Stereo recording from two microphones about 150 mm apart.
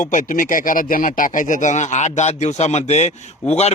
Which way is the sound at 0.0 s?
60° left (ahead or behind).